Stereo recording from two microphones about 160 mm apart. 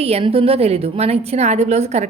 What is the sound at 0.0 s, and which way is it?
A woman's voice, 40° right (ahead or behind).